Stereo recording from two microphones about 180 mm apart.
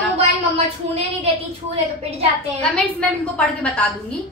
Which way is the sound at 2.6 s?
5° left (ahead or behind).